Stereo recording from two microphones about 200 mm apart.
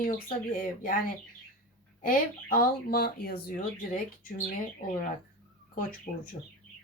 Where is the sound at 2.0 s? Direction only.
45° left (ahead or behind).